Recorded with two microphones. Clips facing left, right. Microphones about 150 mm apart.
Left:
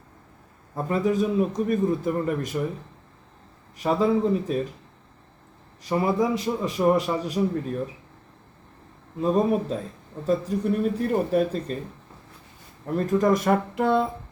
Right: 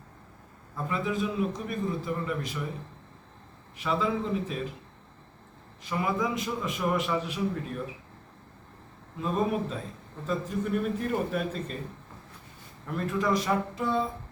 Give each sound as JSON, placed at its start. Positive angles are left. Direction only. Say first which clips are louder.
{"t": 0.8, "sound": "a man's voice", "louder": "left 7 dB", "side_deg": 40}
{"t": 3.8, "sound": "a man's voice", "louder": "left 7 dB", "side_deg": 40}
{"t": 5.8, "sound": "a man's voice", "louder": "left 6 dB", "side_deg": 35}
{"t": 9.2, "sound": "a man's voice", "louder": "left 6 dB", "side_deg": 40}
{"t": 12.8, "sound": "a man's voice", "louder": "left 7 dB", "side_deg": 40}